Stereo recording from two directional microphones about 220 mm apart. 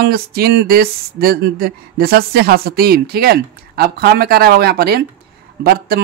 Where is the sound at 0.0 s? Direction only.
45° right (ahead or behind).